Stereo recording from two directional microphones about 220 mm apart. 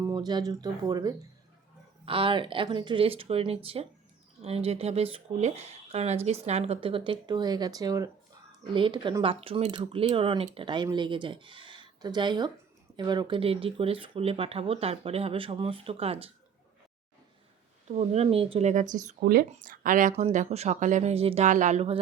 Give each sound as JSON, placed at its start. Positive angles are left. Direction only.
{"t": 0.0, "sound": "speech", "side_deg": -15}
{"t": 17.8, "sound": "speech", "side_deg": -30}